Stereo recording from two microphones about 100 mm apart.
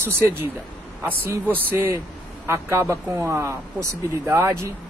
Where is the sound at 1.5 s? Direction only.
20° right (ahead or behind).